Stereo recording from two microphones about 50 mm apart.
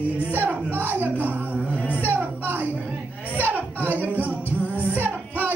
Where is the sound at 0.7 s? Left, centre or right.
Right.